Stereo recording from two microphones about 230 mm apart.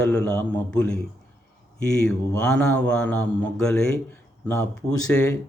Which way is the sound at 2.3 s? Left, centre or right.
Centre.